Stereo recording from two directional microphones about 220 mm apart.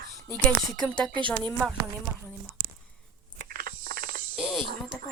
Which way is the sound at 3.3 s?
40° right (ahead or behind).